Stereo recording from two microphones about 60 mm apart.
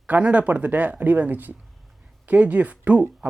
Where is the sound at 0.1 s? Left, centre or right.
Right.